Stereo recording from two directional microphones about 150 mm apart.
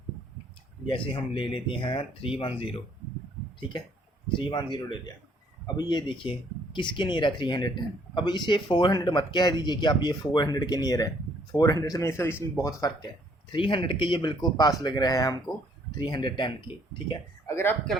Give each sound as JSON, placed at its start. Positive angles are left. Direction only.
{"t": 0.9, "sound": "speech", "side_deg": 35}
{"t": 13.5, "sound": "speech", "side_deg": 35}
{"t": 17.4, "sound": "a sound", "side_deg": 15}